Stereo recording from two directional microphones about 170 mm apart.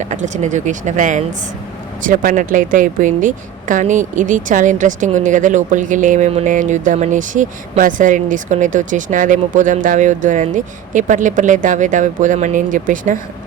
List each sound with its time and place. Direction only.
0.0 s speech: 45° right (ahead or behind)